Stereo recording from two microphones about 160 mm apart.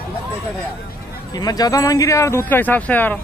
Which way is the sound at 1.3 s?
25° left (ahead or behind).